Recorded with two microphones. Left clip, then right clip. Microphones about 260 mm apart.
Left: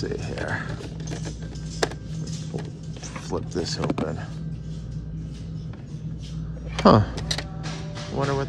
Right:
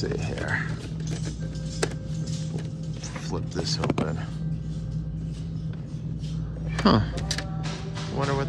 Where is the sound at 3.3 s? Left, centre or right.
Centre.